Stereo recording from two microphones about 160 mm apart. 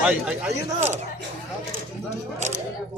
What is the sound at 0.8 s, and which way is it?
Speech, 45° right (ahead or behind).